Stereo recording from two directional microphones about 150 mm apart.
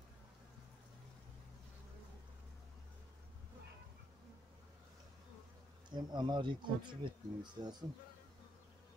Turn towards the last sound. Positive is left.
turn(degrees=-30)  # may be behind; listen again after turning